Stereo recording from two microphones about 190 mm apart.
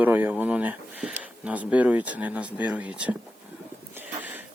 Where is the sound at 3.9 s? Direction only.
10° right (ahead or behind).